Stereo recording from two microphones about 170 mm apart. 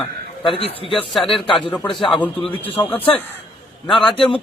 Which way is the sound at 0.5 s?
35° left (ahead or behind).